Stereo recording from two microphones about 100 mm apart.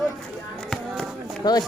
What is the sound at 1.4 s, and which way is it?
Speech, 40° left (ahead or behind).